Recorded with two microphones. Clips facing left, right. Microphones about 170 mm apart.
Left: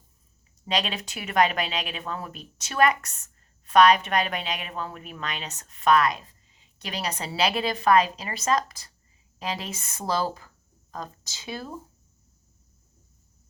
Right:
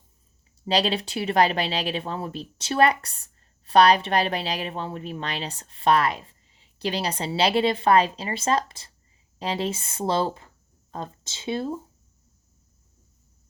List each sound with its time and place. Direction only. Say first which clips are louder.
0.7 s speech: right 5 dB; 30° right (ahead or behind)